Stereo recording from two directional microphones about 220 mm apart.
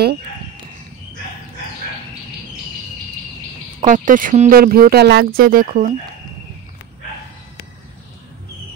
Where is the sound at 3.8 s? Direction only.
35° right (ahead or behind).